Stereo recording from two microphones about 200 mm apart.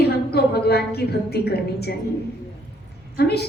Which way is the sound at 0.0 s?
55° left (ahead or behind).